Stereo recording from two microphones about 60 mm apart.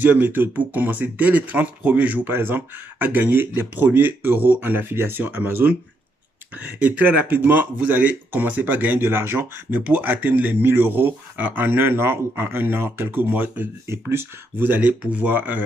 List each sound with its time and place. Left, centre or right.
0.0 s speech: right
2.2 s speech: right
9.7 s speech: right
13.8 s speech: right